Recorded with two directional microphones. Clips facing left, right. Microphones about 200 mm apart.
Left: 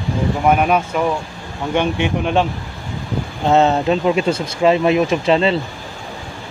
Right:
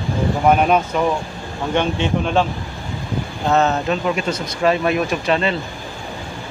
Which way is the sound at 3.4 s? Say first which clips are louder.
Left 3 dB; 25° left (ahead or behind).